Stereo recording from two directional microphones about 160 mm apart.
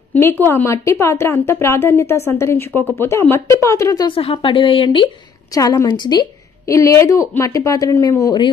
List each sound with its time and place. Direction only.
0.1 s a woman's voice: 15° left (ahead or behind)
4.2 s a woman's voice: 35° left (ahead or behind)